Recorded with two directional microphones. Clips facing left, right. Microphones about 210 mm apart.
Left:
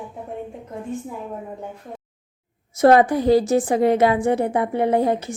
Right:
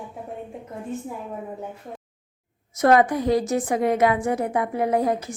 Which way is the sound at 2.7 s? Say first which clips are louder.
Left 3 dB; 30° left (ahead or behind).